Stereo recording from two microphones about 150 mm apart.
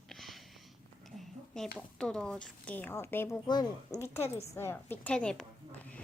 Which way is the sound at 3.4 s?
30° left (ahead or behind).